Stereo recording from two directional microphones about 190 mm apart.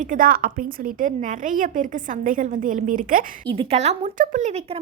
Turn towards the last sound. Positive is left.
turn(degrees=-35)  # may be behind; listen again after turning